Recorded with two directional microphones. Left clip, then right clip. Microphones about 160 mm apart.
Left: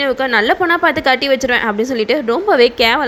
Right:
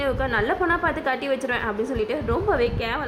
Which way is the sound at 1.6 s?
30° left (ahead or behind).